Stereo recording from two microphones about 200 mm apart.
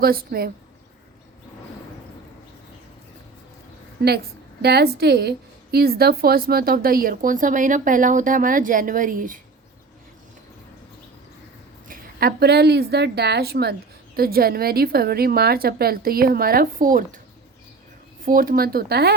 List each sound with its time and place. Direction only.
0.0 s speech: 50° right (ahead or behind)
4.0 s speech: 55° right (ahead or behind)
11.9 s a woman's voice: 50° right (ahead or behind)
18.2 s speech: 45° right (ahead or behind)